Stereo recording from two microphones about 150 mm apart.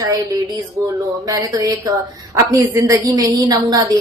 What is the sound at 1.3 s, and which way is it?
A woman's voice, 20° right (ahead or behind).